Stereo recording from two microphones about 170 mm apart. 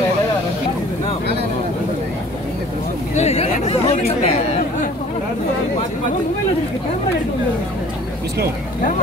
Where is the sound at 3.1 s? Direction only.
40° left (ahead or behind).